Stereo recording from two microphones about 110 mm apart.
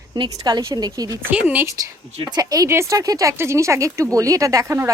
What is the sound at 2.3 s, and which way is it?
Speech, 35° right (ahead or behind).